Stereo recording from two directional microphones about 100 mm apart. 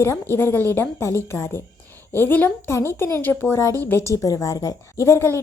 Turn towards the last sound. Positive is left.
turn(degrees=25)  # may be behind; listen again after turning